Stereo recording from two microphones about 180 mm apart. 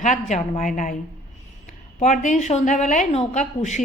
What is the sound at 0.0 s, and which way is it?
Speech, 40° left (ahead or behind).